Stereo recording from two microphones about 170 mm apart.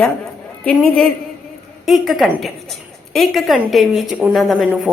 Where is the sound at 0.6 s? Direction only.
5° left (ahead or behind).